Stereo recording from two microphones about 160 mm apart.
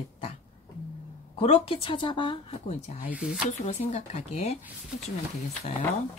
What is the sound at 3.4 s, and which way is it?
Speech, 45° left (ahead or behind).